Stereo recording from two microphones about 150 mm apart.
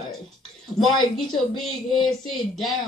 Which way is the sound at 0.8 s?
25° left (ahead or behind).